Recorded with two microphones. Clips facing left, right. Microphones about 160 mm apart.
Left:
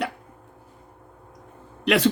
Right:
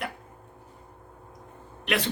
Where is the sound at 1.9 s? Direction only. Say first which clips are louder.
Left 8 dB; 90° left.